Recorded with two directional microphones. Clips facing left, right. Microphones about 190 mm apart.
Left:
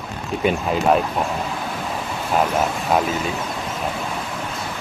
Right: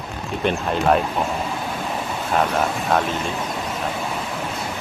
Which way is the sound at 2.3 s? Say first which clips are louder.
Left 1 dB; 5° left (ahead or behind).